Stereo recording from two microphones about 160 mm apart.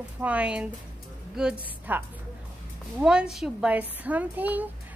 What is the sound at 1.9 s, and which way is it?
A woman's voice, 10° right (ahead or behind).